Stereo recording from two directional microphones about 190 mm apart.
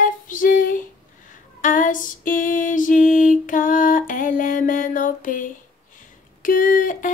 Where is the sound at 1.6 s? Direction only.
45° left (ahead or behind).